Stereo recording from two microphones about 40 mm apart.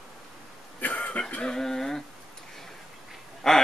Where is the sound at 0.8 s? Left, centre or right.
Left.